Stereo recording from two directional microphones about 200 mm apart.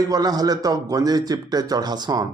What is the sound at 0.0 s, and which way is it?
A man's voice, 20° right (ahead or behind).